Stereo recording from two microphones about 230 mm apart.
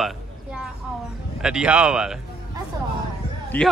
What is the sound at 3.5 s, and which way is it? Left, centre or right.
Speech, centre.